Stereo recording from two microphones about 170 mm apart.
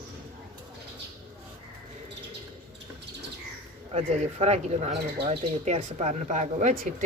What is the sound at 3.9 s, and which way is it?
Speech, 40° right (ahead or behind).